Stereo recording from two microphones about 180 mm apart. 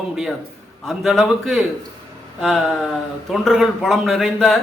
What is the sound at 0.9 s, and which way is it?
Speech, centre (ahead or behind).